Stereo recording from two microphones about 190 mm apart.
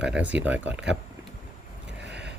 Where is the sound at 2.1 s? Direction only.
65° right (ahead or behind).